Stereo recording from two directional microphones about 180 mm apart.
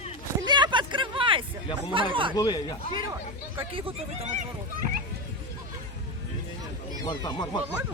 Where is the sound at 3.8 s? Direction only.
35° right (ahead or behind).